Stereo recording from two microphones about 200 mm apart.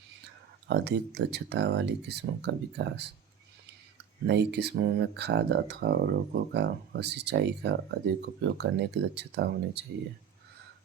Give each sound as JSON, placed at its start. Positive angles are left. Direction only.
{"t": 0.7, "sound": "speech", "side_deg": -55}